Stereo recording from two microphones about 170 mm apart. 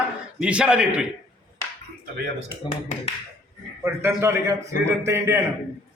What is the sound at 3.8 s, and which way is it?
A man's voice, 15° right (ahead or behind).